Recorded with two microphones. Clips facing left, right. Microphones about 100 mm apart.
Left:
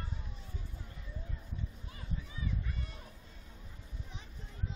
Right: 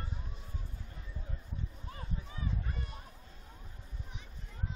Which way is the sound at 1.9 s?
40° right (ahead or behind).